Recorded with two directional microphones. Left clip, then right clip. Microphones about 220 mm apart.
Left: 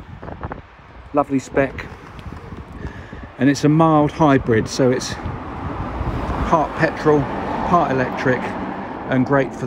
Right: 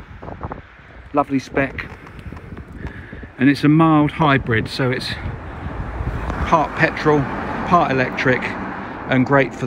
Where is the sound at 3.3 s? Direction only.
20° left (ahead or behind).